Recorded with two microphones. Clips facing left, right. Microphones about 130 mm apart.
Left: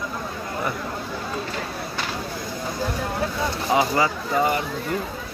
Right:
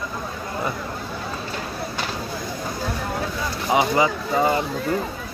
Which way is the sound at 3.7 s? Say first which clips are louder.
Right 2 dB; 20° right (ahead or behind).